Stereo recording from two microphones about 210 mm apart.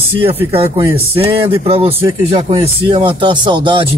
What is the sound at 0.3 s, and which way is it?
Speech, 25° right (ahead or behind).